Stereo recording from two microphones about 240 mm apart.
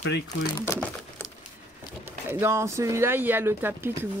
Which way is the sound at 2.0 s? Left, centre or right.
Centre.